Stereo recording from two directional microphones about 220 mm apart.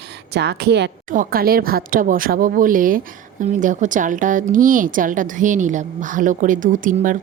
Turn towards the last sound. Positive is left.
turn(degrees=-35)  # may be behind; listen again after turning